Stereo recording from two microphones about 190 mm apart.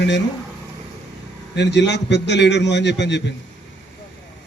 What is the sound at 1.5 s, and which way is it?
A man's voice, 65° left (ahead or behind).